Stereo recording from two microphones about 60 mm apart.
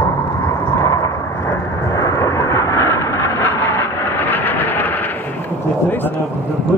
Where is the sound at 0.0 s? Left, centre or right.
Left.